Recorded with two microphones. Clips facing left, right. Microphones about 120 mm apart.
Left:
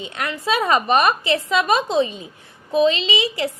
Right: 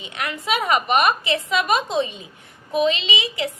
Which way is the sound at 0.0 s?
30° left (ahead or behind).